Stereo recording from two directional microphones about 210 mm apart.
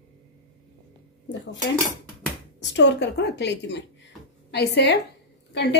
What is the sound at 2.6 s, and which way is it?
A woman's voice, 55° left (ahead or behind).